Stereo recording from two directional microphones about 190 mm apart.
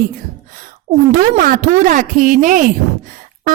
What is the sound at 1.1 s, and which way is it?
Speech, 45° right (ahead or behind).